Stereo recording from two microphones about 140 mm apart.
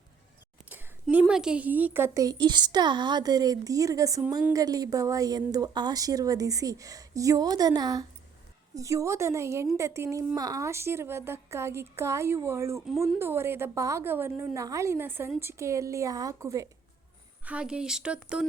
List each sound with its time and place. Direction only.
1.0 s a woman's voice: 5° right (ahead or behind); by 16.6 s 25° right (ahead or behind)
17.4 s a woman's voice: 5° right (ahead or behind)